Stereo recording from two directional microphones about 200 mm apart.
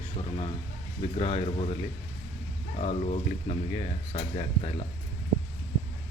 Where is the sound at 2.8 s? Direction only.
30° left (ahead or behind).